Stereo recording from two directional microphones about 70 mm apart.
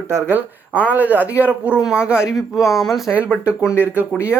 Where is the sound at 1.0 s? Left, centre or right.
Right.